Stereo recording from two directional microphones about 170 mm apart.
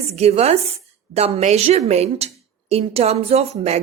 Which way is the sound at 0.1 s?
35° right (ahead or behind).